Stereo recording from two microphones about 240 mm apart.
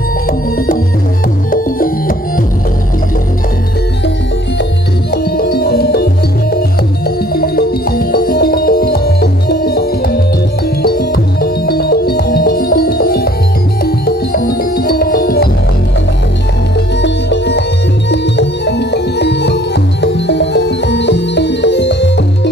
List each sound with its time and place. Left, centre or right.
1.5 s music: left
5.1 s music: left
7.3 s music: left
17.0 s music: left